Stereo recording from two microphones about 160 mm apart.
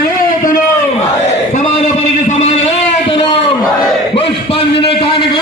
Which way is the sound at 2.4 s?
45° left (ahead or behind).